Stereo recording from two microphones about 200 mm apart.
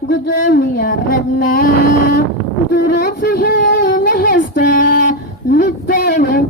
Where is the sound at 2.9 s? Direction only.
55° left (ahead or behind).